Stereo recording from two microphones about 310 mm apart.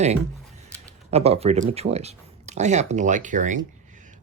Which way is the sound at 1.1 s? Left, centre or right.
Centre.